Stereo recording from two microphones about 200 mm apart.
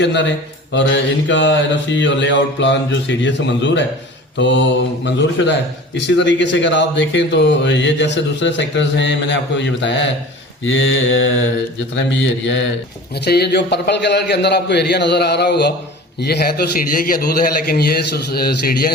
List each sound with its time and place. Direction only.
0.0 s speech: 60° left (ahead or behind)
1.3 s speech: 65° left (ahead or behind)
10.6 s mantra: 70° left (ahead or behind)
13.1 s a man's voice: 55° left (ahead or behind)